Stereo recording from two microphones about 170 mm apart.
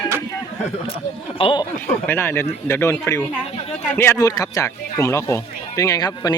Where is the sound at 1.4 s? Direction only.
30° left (ahead or behind).